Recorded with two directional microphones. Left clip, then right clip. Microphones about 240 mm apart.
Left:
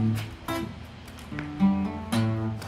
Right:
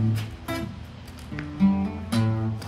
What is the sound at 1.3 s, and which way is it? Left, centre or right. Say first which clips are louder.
Music: right 2 dB; centre.